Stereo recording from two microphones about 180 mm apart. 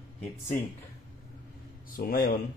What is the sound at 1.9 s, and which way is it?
Speech, 55° left (ahead or behind).